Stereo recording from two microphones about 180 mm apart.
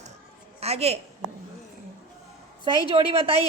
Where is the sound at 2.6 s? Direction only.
30° right (ahead or behind).